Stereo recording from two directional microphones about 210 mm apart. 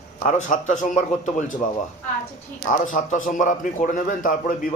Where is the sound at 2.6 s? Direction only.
40° left (ahead or behind).